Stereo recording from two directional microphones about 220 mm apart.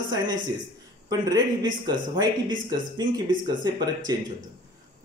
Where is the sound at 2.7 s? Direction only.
20° right (ahead or behind).